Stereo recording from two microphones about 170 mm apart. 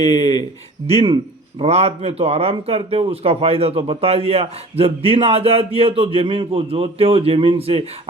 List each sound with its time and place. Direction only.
0.0 s speech: 40° right (ahead or behind)